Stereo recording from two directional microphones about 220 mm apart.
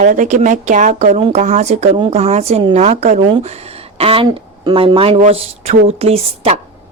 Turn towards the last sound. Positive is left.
turn(degrees=-30)  # may be behind; listen again after turning